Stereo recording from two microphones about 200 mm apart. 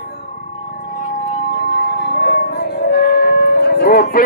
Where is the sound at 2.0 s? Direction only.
55° left (ahead or behind).